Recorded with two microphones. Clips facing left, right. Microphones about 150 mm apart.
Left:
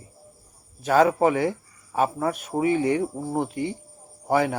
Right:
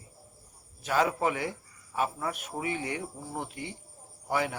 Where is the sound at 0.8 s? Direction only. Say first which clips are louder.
Left 8 dB; 45° left (ahead or behind).